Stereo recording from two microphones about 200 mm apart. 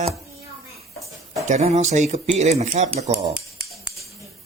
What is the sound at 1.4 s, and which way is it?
Speech, 35° right (ahead or behind).